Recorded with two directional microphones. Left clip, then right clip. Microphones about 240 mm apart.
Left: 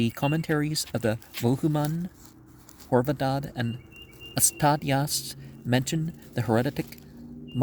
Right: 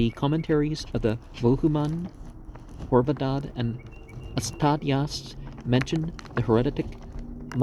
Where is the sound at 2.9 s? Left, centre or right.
Left.